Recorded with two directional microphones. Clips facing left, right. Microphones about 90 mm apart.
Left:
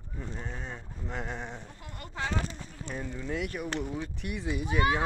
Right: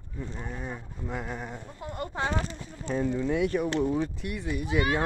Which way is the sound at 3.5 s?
35° right (ahead or behind).